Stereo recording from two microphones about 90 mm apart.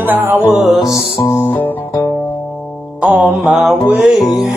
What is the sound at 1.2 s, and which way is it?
Music, 25° left (ahead or behind).